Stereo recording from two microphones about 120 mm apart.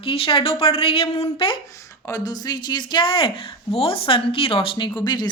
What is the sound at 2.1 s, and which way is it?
Speech, 30° left (ahead or behind).